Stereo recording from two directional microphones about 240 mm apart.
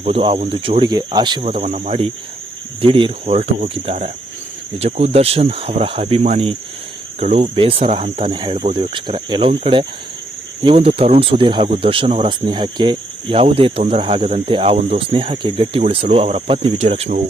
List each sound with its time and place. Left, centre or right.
0.0 s speech: right